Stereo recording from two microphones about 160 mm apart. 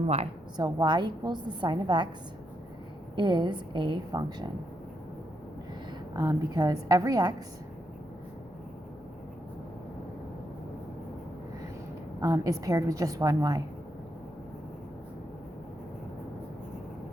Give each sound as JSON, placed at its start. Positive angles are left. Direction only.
{"t": 0.5, "sound": "a woman's voice", "side_deg": -25}
{"t": 3.2, "sound": "a woman's voice", "side_deg": -30}
{"t": 6.1, "sound": "a woman's voice", "side_deg": -25}
{"t": 12.2, "sound": "a woman's voice", "side_deg": -20}